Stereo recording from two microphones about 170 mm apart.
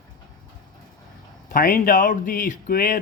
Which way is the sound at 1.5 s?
55° left (ahead or behind).